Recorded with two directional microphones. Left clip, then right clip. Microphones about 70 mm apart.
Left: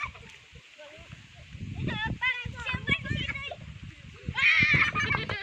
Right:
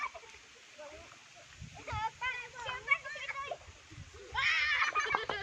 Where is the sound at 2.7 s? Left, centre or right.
Centre.